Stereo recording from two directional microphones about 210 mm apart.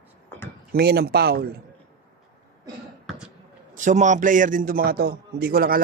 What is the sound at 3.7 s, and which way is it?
A man's voice, 35° right (ahead or behind).